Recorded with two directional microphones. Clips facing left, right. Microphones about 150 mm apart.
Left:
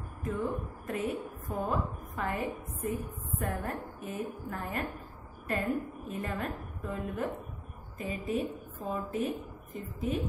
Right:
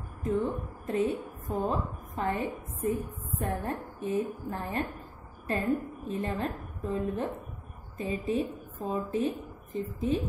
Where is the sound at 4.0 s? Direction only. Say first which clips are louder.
Right 7 dB; 30° right (ahead or behind).